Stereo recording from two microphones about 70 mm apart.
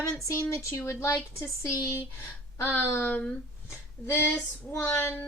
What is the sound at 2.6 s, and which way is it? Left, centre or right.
Speech, left.